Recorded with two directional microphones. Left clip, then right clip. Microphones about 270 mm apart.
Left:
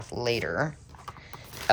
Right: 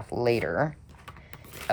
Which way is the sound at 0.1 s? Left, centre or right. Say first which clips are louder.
Right 3 dB; centre.